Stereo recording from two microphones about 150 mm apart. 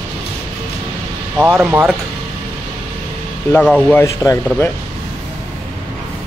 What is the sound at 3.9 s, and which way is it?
Speech, 20° left (ahead or behind).